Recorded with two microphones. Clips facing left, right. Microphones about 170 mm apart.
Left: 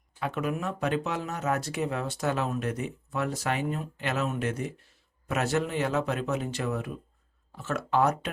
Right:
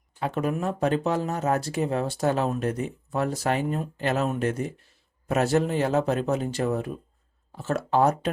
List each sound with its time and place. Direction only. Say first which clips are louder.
0.2 s speech: right 4 dB; 35° right (ahead or behind)